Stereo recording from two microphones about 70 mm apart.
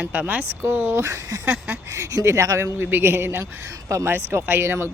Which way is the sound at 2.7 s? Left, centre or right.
Right.